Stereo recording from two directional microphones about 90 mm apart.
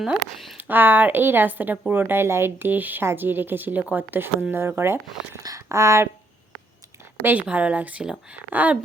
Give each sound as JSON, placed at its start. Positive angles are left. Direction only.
{"t": 0.0, "sound": "speech", "side_deg": -5}
{"t": 0.5, "sound": "speech", "side_deg": -20}
{"t": 5.4, "sound": "speech", "side_deg": -40}
{"t": 7.2, "sound": "speech", "side_deg": -20}